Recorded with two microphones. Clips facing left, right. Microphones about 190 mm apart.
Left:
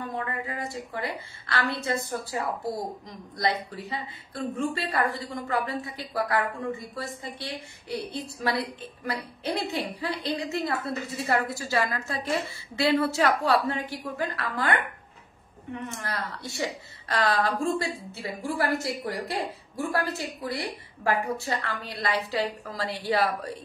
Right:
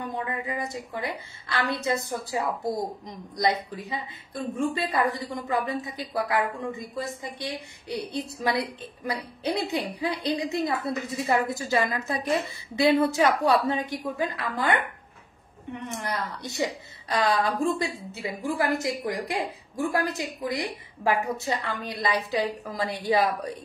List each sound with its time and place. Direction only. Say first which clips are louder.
0.2 s a woman's voice: right 2 dB; 15° right (ahead or behind)
15.9 s a woman's voice: right 3 dB; 20° right (ahead or behind)